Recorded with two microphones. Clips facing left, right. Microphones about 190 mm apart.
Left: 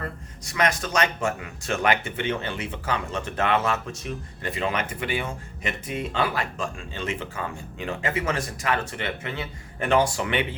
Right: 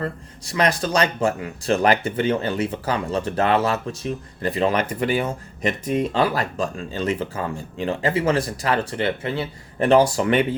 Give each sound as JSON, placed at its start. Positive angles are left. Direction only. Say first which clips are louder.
{"t": 0.0, "sound": "speech", "louder": "right 6 dB", "side_deg": -30}